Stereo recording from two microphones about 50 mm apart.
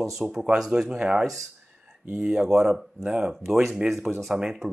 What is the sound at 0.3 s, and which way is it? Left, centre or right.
Speech, centre.